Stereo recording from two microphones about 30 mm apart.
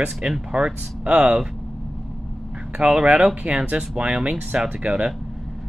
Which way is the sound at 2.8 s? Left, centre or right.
Right.